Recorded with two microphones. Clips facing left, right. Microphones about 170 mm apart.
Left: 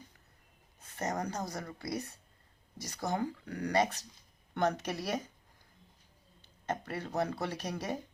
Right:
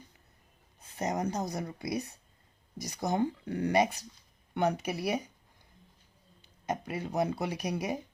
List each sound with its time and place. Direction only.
0.8 s speech: 15° right (ahead or behind)
6.4 s speech: 15° right (ahead or behind)